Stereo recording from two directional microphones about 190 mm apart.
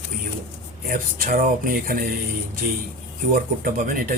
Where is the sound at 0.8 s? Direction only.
50° right (ahead or behind).